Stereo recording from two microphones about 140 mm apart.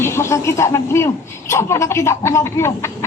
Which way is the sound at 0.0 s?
20° left (ahead or behind).